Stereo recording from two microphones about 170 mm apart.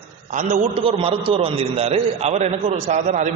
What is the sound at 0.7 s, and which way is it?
A man's voice, 35° right (ahead or behind).